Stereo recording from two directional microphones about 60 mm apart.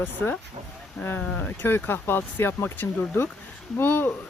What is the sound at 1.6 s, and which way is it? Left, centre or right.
Speech, left.